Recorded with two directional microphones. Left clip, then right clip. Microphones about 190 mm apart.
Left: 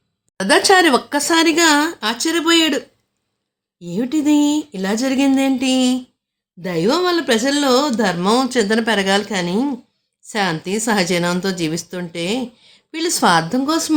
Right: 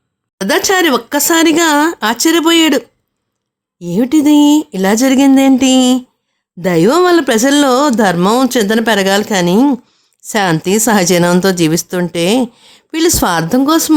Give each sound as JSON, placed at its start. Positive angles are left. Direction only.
{"t": 0.3, "sound": "speech", "side_deg": -25}
{"t": 1.3, "sound": "speech", "side_deg": -50}